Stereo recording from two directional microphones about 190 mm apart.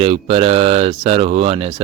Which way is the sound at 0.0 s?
30° right (ahead or behind).